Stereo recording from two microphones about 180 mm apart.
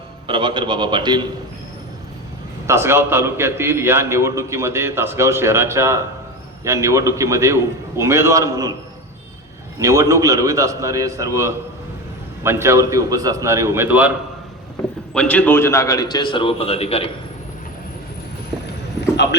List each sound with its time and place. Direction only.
0.3 s a man's voice: 25° right (ahead or behind)
2.6 s a man's voice: 15° right (ahead or behind)
9.7 s a man's voice: 15° right (ahead or behind)
15.1 s a man's voice: 5° left (ahead or behind); by 17.1 s 35° left (ahead or behind)
19.1 s clip-clop: 75° left (ahead or behind)